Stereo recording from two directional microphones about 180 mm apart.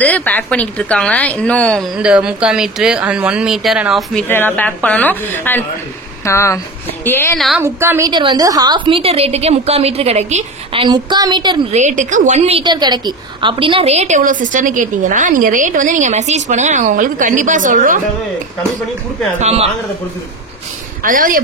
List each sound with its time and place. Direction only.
0.0 s a woman's voice: 10° left (ahead or behind)
2.0 s a woman's voice: 5° right (ahead or behind); by 7.3 s 10° left (ahead or behind)
7.3 s speech: centre (ahead or behind)
7.6 s a woman's voice: 15° right (ahead or behind)
8.1 s a woman's voice: 25° right (ahead or behind)
11.7 s a woman's voice: 40° right (ahead or behind)
19.4 s a man's voice: 35° right (ahead or behind)
21.0 s a woman's voice: 50° right (ahead or behind)